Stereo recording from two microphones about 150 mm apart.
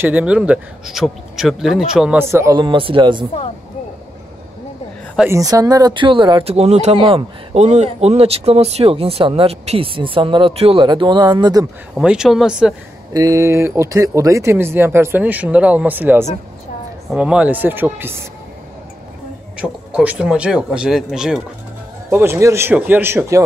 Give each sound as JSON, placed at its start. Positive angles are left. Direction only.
{"t": 0.0, "sound": "speech", "side_deg": -10}
{"t": 2.1, "sound": "speech", "side_deg": -15}
{"t": 2.5, "sound": "speech", "side_deg": -35}
{"t": 5.3, "sound": "speech", "side_deg": -20}
{"t": 11.9, "sound": "speech", "side_deg": -5}
{"t": 13.1, "sound": "speech", "side_deg": -25}
{"t": 19.5, "sound": "speech", "side_deg": -10}
{"t": 22.1, "sound": "speech", "side_deg": -15}